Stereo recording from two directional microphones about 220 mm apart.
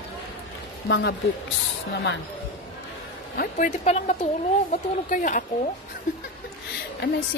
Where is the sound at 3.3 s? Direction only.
35° left (ahead or behind).